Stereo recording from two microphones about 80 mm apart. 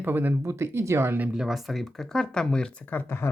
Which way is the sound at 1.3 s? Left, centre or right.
Centre.